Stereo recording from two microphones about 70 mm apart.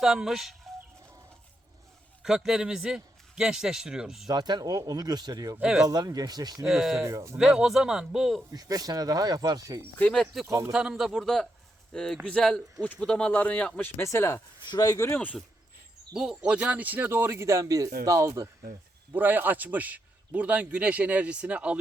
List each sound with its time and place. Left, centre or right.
0.0 s a man's voice: centre
2.2 s a man's voice: centre
4.3 s speech: right
5.6 s a man's voice: centre
5.9 s speech: right
6.6 s a man's voice: centre
8.4 s speech: right
10.4 s speech: right
10.7 s a man's voice: centre
13.7 s speech: left
14.7 s speech: left
14.9 s speech: left
16.1 s speech: centre; by 18.4 s right
19.1 s a man's voice: right